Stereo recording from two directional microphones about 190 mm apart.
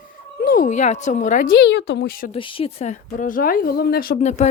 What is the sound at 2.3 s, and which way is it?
Speech, 30° left (ahead or behind).